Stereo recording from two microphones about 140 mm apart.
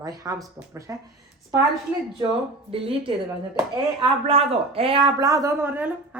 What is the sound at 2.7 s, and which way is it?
A woman's voice, 45° right (ahead or behind).